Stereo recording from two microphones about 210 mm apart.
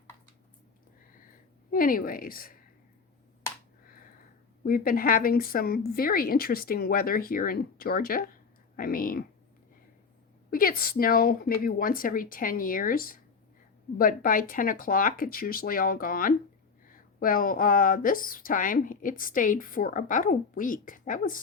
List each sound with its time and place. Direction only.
1.7 s a woman's voice: 45° left (ahead or behind)
4.6 s a woman's voice: 45° left (ahead or behind)
10.5 s a woman's voice: 45° left (ahead or behind)